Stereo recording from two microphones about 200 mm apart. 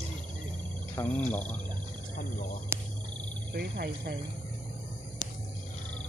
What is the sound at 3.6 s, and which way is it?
Speech, 55° right (ahead or behind).